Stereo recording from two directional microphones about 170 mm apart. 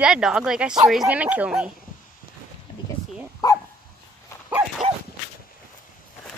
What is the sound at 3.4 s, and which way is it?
Dog, 25° left (ahead or behind).